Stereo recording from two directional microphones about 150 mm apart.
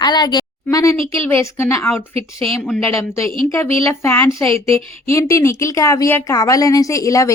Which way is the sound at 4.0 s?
15° left (ahead or behind).